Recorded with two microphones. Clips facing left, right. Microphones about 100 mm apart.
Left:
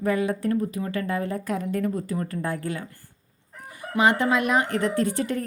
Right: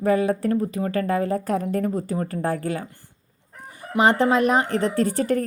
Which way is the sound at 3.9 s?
35° right (ahead or behind).